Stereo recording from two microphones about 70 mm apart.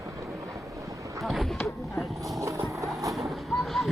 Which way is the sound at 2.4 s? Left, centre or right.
Right.